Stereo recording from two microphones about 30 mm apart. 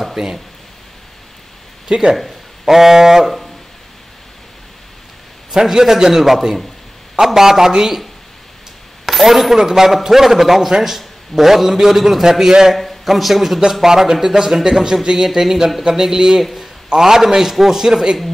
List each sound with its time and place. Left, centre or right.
0.2 s a man's voice: centre
1.9 s speech: centre
2.1 s a sound: centre
2.7 s a man's voice: centre
5.5 s a man's voice: centre
9.0 s coin: centre
9.6 s a man's voice: centre
12.7 s a man's voice: centre
14.2 s a man's voice: right